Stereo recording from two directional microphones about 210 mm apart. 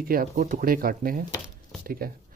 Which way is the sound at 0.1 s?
45° right (ahead or behind).